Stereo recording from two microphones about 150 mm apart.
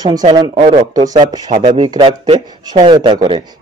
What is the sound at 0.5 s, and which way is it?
Speech, 40° right (ahead or behind).